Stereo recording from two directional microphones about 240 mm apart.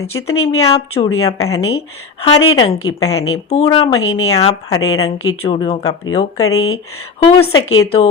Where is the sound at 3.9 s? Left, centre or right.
Left.